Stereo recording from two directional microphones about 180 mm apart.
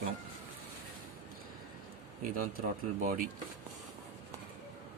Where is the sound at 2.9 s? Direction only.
50° right (ahead or behind).